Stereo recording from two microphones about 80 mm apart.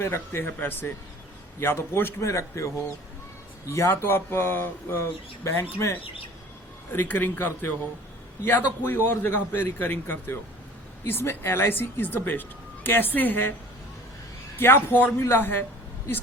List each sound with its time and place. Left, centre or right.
0.0 s speech: left
3.7 s speech: left
8.8 s speech: left
14.6 s speech: left